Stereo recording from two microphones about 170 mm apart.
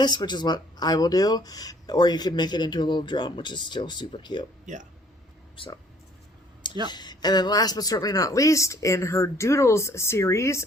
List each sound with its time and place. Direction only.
0.0 s speech: 25° left (ahead or behind)
4.7 s speech: 45° right (ahead or behind)
5.5 s speech: 30° left (ahead or behind)
6.8 s speech: 25° left (ahead or behind)